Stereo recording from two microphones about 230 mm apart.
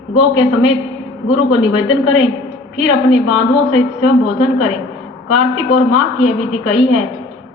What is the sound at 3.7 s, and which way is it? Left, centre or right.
Speech, left.